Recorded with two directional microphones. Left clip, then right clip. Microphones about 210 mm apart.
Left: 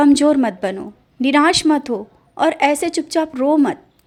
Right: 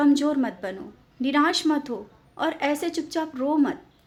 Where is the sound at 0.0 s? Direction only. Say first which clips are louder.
Left 9 dB; 35° left (ahead or behind).